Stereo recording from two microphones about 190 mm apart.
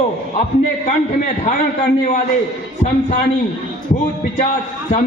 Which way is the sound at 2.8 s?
35° left (ahead or behind).